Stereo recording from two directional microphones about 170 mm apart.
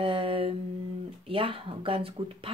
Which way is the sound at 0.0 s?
35° right (ahead or behind).